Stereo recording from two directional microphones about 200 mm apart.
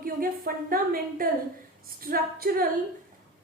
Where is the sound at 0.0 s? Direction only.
45° right (ahead or behind).